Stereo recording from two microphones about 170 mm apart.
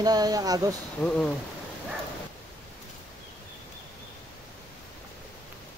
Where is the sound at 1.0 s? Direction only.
5° left (ahead or behind).